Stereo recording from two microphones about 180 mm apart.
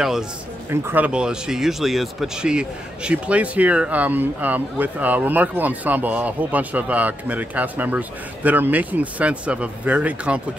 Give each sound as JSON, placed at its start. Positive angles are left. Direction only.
{"t": 0.7, "sound": "speech", "side_deg": -10}